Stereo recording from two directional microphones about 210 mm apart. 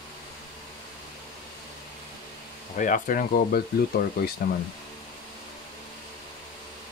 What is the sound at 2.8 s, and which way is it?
Speech, 40° left (ahead or behind).